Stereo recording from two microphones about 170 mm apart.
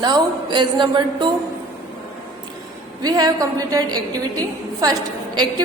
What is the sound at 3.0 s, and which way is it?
A woman's voice, 20° right (ahead or behind).